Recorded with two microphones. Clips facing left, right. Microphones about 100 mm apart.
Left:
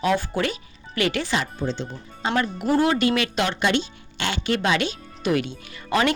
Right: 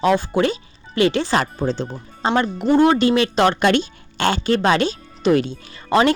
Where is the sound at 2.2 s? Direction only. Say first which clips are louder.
Right 5 dB; 30° right (ahead or behind).